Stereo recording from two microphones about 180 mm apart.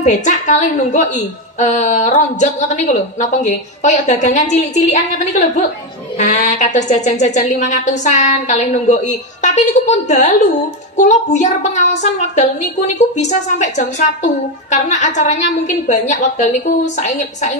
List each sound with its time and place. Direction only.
0.0 s a woman's voice: 40° left (ahead or behind)
6.1 s a woman's voice: 40° left (ahead or behind)